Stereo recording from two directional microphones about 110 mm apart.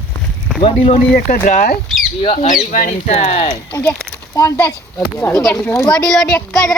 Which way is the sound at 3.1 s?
80° left.